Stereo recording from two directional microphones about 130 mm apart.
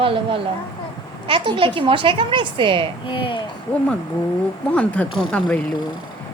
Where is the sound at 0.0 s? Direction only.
45° right (ahead or behind).